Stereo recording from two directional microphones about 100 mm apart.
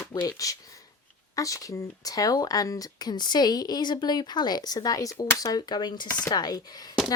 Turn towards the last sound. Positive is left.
turn(degrees=40)  # may be behind; listen again after turning